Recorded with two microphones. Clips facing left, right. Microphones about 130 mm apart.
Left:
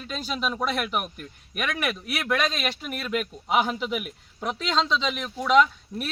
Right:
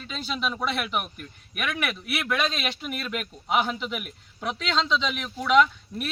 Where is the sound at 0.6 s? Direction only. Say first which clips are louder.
Left 1 dB; 45° left (ahead or behind).